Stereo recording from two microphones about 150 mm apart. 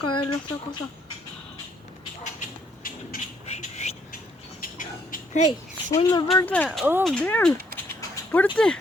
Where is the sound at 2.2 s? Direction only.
55° left (ahead or behind).